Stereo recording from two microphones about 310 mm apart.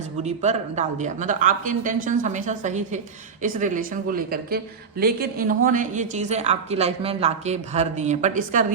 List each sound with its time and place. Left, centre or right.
0.2 s a woman's voice: right